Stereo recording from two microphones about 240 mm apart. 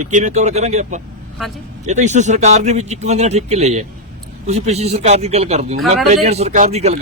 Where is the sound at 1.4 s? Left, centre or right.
Centre.